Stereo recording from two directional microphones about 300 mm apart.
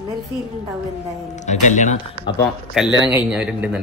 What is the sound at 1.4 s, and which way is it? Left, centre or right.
Speech, left.